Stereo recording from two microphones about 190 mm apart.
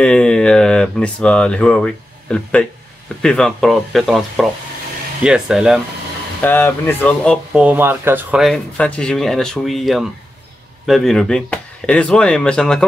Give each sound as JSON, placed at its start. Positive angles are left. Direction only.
{"t": 0.0, "sound": "speech", "side_deg": 5}
{"t": 6.4, "sound": "speech", "side_deg": 10}
{"t": 7.5, "sound": "speech", "side_deg": -10}